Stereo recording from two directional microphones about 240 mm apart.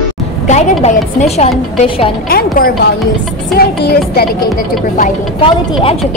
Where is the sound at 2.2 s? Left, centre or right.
Left.